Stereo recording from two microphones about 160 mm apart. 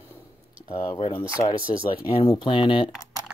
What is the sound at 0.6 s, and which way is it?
Speech, 35° left (ahead or behind).